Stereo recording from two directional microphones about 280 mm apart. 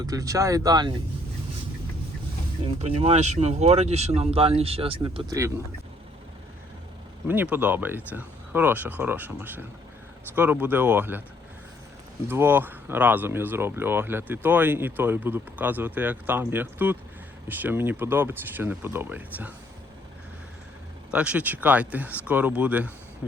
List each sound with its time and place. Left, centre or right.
0.0 s speech: centre
2.6 s speech: right
7.3 s speech: centre
12.3 s speech: centre
21.1 s speech: centre